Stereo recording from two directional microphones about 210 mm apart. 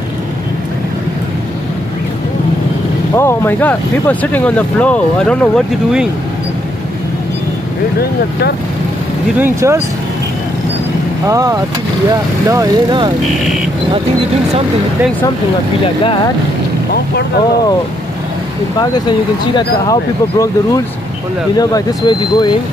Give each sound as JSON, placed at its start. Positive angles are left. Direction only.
{"t": 3.2, "sound": "speech", "side_deg": 10}
{"t": 8.0, "sound": "speech", "side_deg": 50}
{"t": 9.4, "sound": "speech", "side_deg": -15}
{"t": 11.2, "sound": "speech", "side_deg": -15}
{"t": 18.8, "sound": "speech", "side_deg": 20}